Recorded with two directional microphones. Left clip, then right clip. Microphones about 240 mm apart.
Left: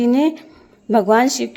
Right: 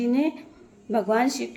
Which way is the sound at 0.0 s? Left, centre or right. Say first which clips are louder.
Left 8 dB; left.